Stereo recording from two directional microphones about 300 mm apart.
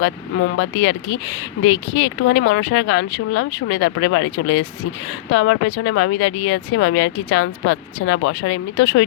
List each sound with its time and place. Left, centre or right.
0.0 s speech: left
1.7 s speech: left
2.2 s speech: left